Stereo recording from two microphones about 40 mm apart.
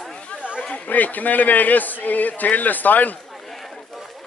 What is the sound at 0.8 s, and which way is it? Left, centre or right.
Speech, left.